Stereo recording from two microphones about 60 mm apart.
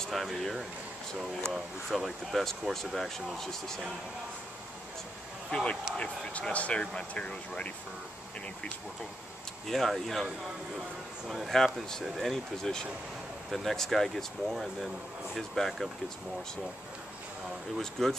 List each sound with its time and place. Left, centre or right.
0.0 s speech: centre
5.5 s speech: centre
9.7 s speech: centre
11.2 s speech: centre
17.7 s speech: centre